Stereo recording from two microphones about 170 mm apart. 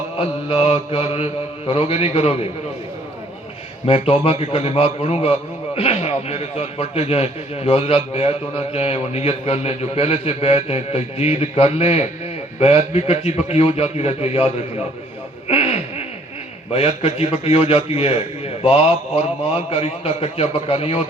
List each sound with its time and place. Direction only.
0.5 s a man's voice: 35° left (ahead or behind)
3.8 s a man's voice: 35° left (ahead or behind)
15.4 s a sound: 35° left (ahead or behind)
16.7 s a man's voice: 35° left (ahead or behind)